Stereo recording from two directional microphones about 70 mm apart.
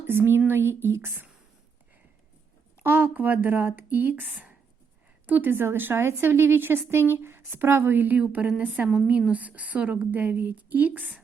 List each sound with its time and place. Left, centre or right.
0.1 s a woman's voice: right
2.8 s a woman's voice: right
8.2 s a woman's voice: centre